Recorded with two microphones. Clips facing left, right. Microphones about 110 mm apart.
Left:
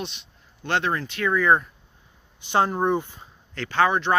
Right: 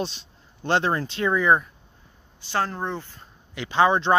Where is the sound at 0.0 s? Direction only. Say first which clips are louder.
Right 4 dB; 35° right (ahead or behind).